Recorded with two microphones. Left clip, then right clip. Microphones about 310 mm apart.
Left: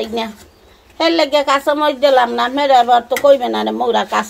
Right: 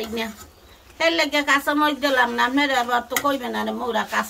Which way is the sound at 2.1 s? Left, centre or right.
Centre.